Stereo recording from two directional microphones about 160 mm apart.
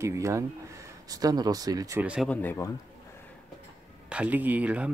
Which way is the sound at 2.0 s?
5° right (ahead or behind).